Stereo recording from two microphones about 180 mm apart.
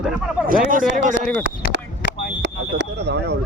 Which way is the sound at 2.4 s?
70° right (ahead or behind).